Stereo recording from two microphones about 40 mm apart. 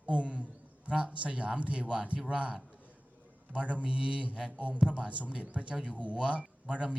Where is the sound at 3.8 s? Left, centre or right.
Right.